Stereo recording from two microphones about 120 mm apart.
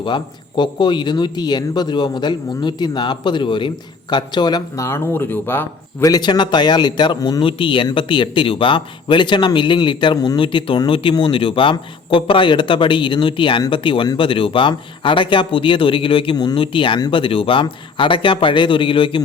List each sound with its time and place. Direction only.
0.0 s speech: 40° left (ahead or behind)
4.9 s speech: 20° left (ahead or behind)
6.1 s speech: 35° left (ahead or behind)
7.4 s speech: 45° left (ahead or behind)